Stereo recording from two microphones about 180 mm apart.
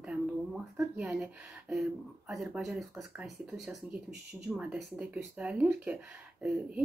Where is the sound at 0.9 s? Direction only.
Centre (ahead or behind).